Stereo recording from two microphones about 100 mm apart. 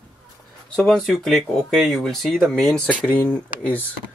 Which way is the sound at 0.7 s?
Centre (ahead or behind).